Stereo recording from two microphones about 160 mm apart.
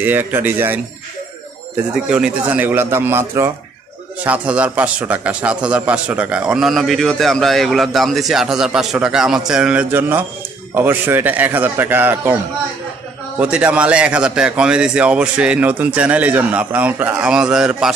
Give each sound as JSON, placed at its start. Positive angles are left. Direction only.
{"t": 0.0, "sound": "a man's voice", "side_deg": -10}
{"t": 2.0, "sound": "a man's voice", "side_deg": -10}
{"t": 13.4, "sound": "a man's voice", "side_deg": -10}